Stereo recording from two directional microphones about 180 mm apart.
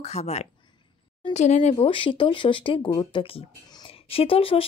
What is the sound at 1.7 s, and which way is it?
Speech, 30° left (ahead or behind).